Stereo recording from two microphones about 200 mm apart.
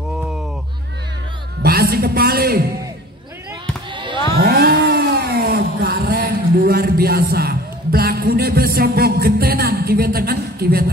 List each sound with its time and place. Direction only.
1.6 s a man's voice: 50° right (ahead or behind)
3.9 s basketball bounce: 25° right (ahead or behind)
4.4 s a sound: 55° right (ahead or behind)